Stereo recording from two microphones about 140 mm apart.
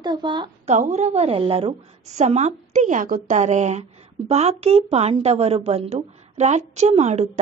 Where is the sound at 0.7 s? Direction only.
60° right (ahead or behind).